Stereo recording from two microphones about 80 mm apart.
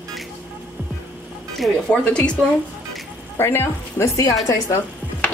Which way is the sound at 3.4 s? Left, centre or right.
Left.